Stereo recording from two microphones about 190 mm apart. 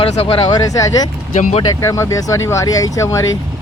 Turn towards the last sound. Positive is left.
turn(degrees=15)  # may be behind; listen again after turning